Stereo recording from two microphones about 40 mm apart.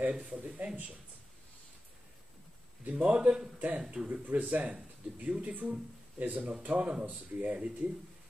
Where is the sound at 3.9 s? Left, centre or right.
Right.